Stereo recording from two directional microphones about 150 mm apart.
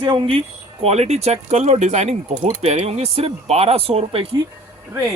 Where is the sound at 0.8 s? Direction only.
45° right (ahead or behind).